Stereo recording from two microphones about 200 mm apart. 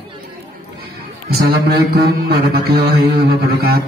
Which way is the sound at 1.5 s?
50° right (ahead or behind).